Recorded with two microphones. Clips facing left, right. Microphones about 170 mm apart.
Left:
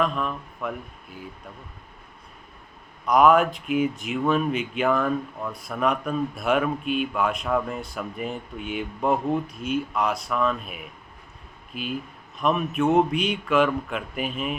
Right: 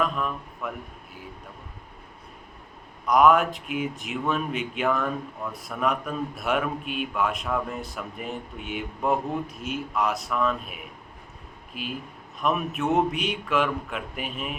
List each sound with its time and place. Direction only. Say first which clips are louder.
0.0 s speech: left 2 dB; 5° right (ahead or behind)
3.1 s speech: left 1 dB; centre (ahead or behind)